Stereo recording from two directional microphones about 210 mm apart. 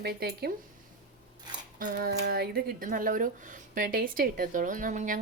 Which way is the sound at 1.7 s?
45° right (ahead or behind).